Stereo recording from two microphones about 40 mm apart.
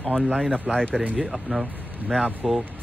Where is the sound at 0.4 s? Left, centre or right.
Centre.